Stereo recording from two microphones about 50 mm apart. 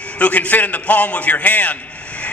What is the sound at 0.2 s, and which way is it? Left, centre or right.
A man's voice, left.